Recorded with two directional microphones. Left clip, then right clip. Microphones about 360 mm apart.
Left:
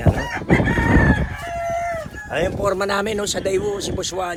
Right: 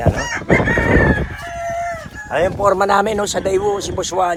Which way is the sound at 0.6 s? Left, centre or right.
Left.